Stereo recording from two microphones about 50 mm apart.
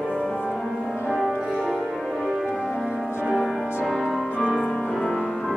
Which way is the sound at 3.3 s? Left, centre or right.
Centre.